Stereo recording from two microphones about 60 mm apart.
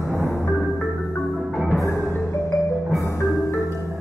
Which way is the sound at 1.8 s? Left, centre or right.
Left.